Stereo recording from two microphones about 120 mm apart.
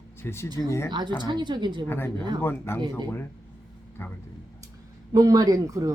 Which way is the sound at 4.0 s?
20° left (ahead or behind).